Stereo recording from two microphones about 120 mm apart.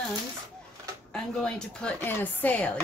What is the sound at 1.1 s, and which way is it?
A woman's voice, 5° left (ahead or behind).